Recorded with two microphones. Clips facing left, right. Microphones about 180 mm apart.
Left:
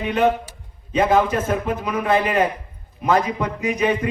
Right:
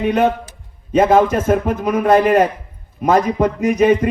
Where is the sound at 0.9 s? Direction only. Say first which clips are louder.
Right 5 dB; 45° right (ahead or behind).